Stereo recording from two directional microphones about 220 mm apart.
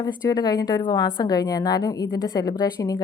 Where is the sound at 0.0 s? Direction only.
15° left (ahead or behind).